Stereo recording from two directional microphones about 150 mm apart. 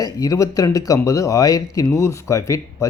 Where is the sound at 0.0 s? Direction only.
25° left (ahead or behind).